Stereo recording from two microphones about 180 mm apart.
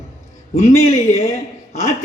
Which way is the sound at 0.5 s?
40° left (ahead or behind).